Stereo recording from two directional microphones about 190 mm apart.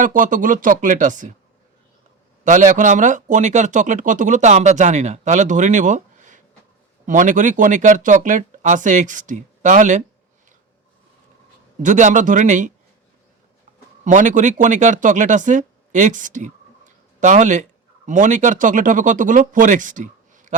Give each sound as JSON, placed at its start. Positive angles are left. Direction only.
{"t": 0.0, "sound": "speech", "side_deg": -45}
{"t": 2.4, "sound": "speech", "side_deg": -40}
{"t": 11.8, "sound": "speech", "side_deg": -40}
{"t": 14.0, "sound": "speech", "side_deg": -40}